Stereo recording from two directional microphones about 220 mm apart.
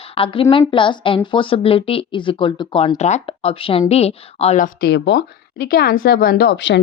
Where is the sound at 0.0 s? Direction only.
25° left (ahead or behind).